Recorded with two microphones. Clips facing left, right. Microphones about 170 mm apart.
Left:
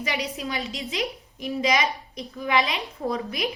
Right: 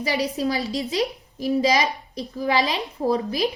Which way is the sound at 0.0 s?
35° right (ahead or behind).